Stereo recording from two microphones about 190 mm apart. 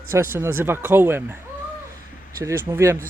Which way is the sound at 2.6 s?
15° right (ahead or behind).